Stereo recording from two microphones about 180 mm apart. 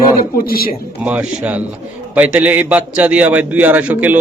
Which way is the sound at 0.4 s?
55° left (ahead or behind).